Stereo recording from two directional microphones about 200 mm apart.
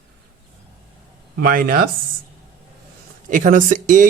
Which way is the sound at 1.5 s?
45° right (ahead or behind).